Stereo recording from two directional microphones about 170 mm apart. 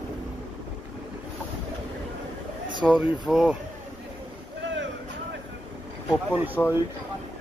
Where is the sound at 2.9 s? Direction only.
5° right (ahead or behind).